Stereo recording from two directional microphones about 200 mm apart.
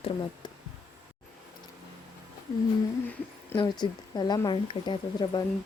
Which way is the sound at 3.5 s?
20° left (ahead or behind).